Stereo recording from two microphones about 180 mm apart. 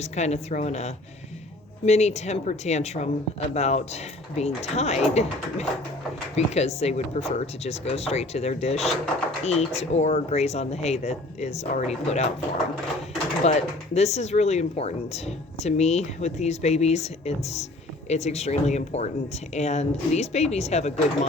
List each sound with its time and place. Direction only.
0.0 s speech: 35° left (ahead or behind)
13.4 s speech: 35° left (ahead or behind)